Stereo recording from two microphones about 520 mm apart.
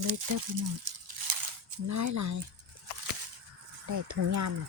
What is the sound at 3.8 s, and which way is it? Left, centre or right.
Speech, right.